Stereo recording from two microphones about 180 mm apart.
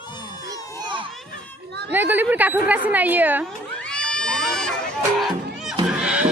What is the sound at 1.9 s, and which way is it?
A woman's voice, 10° right (ahead or behind).